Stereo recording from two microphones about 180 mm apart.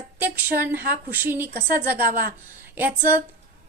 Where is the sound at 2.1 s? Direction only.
50° right (ahead or behind).